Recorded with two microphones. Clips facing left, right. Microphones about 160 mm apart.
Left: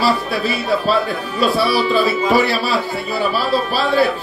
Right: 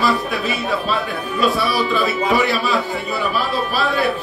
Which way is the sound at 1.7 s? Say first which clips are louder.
Left 3 dB; 30° left (ahead or behind).